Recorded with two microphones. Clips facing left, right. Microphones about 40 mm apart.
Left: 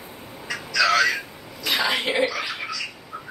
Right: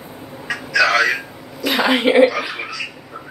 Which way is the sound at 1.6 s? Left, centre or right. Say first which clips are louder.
Right 5 dB; centre.